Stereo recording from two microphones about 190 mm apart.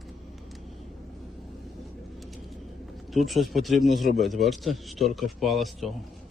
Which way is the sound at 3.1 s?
Centre (ahead or behind).